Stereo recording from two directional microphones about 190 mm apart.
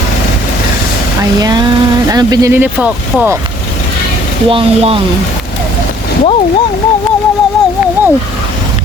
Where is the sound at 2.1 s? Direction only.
20° right (ahead or behind).